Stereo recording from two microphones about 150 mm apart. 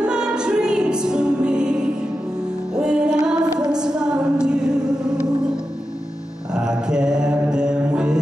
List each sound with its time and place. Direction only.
0.0 s music: 5° right (ahead or behind)
6.5 s mantra: 5° right (ahead or behind)